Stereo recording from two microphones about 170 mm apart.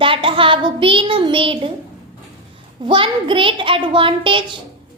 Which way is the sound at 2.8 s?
30° right (ahead or behind).